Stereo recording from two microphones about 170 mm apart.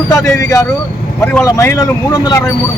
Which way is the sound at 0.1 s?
20° left (ahead or behind).